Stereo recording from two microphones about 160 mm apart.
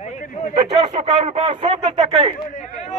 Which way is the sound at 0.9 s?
45° right (ahead or behind).